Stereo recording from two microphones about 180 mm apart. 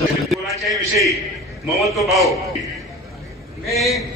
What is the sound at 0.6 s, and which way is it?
A man's voice, centre (ahead or behind).